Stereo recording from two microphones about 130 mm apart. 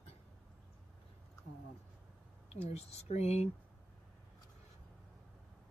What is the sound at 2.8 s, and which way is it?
Speech, 55° left (ahead or behind).